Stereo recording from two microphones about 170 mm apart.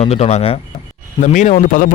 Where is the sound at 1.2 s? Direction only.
45° left (ahead or behind).